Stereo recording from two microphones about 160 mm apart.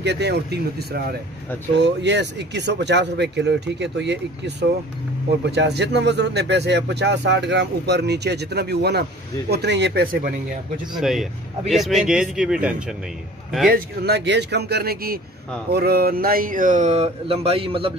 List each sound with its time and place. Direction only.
0.0 s speech: 90° right
11.0 s speech: centre (ahead or behind)
13.7 s speech: 80° right; by 17.9 s 35° right (ahead or behind)